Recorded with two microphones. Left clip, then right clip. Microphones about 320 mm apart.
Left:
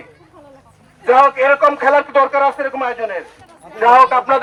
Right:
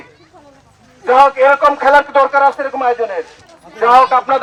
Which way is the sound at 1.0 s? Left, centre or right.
Centre.